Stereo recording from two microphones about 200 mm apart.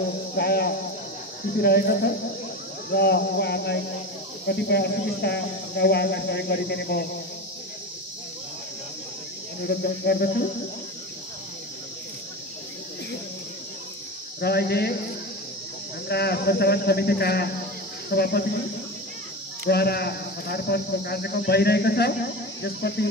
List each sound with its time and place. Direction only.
0.3 s speech: 50° left (ahead or behind)
9.7 s speech: 50° left (ahead or behind)
14.4 s speech: 50° left (ahead or behind)
16.1 s speech: 55° left (ahead or behind)
19.7 s speech: 55° left (ahead or behind)